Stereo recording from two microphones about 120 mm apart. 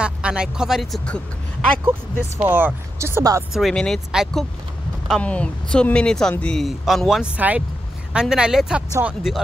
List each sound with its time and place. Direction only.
0.0 s speech: 10° right (ahead or behind)
2.3 s speech: 20° right (ahead or behind)
3.5 s speech: centre (ahead or behind)